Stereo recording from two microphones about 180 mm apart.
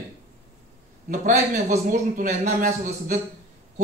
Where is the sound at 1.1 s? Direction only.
45° right (ahead or behind).